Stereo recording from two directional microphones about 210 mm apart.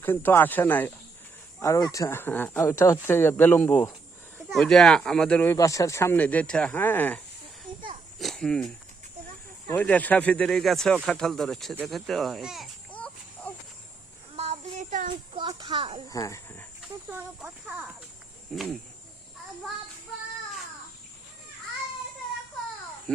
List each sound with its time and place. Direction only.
0.0 s speech: 10° left (ahead or behind)
8.2 s speech: centre (ahead or behind)
14.3 s a sound: 30° right (ahead or behind)
15.1 s speech: 25° right (ahead or behind)
16.0 s speech: 15° left (ahead or behind)
17.1 s speech: 10° right (ahead or behind)
18.5 s cricket: centre (ahead or behind)
23.1 s a child's voice: 5° left (ahead or behind)